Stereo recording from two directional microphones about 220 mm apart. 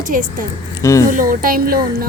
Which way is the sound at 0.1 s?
40° right (ahead or behind).